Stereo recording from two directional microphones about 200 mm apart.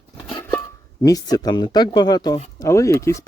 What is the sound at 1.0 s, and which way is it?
Speech, 20° left (ahead or behind).